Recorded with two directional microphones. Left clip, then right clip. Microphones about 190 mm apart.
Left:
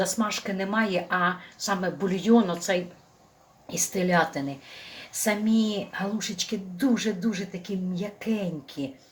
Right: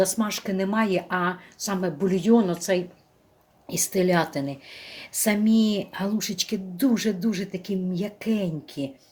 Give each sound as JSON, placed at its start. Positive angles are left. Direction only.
{"t": 0.0, "sound": "a woman's voice", "side_deg": -45}